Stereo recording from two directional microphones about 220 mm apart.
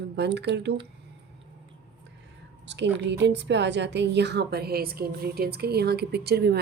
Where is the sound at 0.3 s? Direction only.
50° right (ahead or behind).